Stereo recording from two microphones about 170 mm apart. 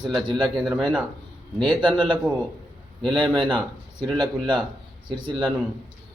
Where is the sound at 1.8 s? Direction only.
25° right (ahead or behind).